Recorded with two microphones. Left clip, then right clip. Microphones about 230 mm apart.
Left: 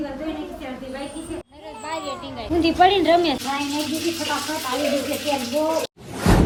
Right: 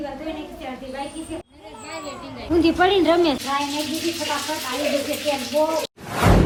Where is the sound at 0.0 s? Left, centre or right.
Centre.